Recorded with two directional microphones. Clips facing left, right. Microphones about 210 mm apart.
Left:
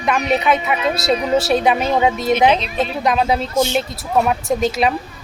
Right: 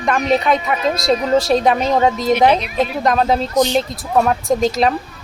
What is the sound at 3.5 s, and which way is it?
Speech, 15° right (ahead or behind).